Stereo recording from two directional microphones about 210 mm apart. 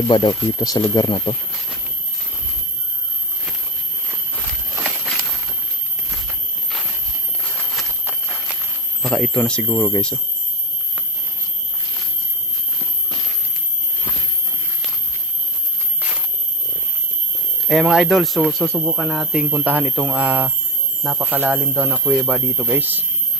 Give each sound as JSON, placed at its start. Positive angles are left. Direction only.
{"t": 0.1, "sound": "speech", "side_deg": 20}
{"t": 7.5, "sound": "a sound", "side_deg": 0}
{"t": 9.0, "sound": "speech", "side_deg": 0}
{"t": 17.7, "sound": "speech", "side_deg": 0}